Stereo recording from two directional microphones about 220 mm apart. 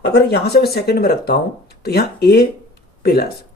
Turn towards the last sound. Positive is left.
turn(degrees=45)  # may be behind; listen again after turning